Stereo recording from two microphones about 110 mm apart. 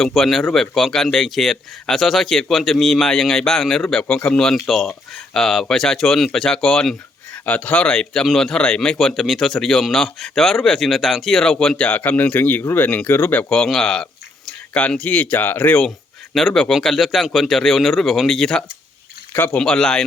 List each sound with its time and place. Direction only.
0.0 s speech: centre (ahead or behind)
16.3 s speech: centre (ahead or behind)
19.3 s speech: 20° left (ahead or behind)
19.5 s speech: 5° left (ahead or behind)